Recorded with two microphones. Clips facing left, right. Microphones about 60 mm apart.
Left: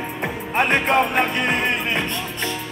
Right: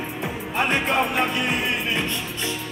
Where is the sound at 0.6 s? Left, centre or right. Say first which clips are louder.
Left 4 dB; left.